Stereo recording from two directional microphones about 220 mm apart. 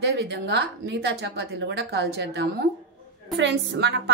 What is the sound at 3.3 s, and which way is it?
Speech, 50° right (ahead or behind).